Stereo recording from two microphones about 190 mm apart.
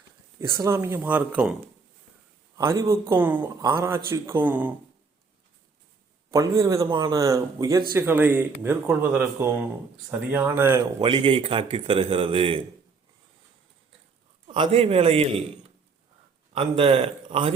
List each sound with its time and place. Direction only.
0.3 s speech: 15° right (ahead or behind)
2.6 s speech: 15° right (ahead or behind)
6.3 s speech: 15° right (ahead or behind)
11.0 s a man's voice: 25° right (ahead or behind)
14.4 s a man's voice: 30° right (ahead or behind)
16.6 s a man's voice: 30° right (ahead or behind)